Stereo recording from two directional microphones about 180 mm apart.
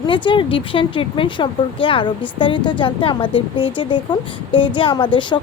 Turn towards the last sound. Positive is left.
turn(degrees=25)  # may be behind; listen again after turning